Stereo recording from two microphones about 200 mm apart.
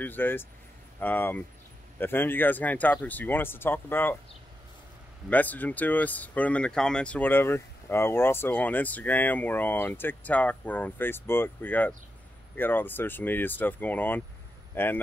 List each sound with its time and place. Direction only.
0.0 s speech: 10° left (ahead or behind)
5.3 s speech: 10° left (ahead or behind)